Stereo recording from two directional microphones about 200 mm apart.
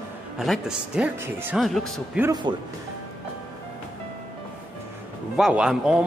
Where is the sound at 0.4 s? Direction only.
Centre (ahead or behind).